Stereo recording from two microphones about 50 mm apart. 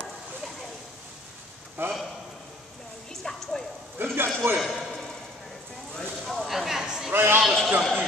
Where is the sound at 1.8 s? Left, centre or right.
Right.